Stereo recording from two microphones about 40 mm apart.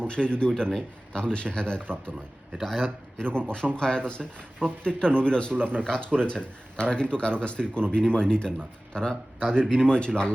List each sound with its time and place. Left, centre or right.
0.0 s speech: left
1.1 s a man's voice: left